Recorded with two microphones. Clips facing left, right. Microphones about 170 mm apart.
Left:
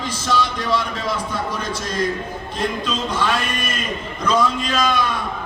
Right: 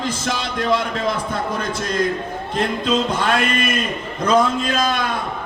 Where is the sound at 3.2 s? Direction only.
55° right (ahead or behind).